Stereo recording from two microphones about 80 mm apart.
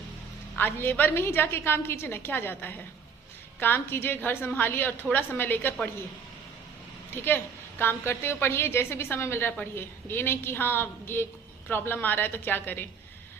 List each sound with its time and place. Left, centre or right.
0.5 s a woman's voice: left
7.1 s a woman's voice: left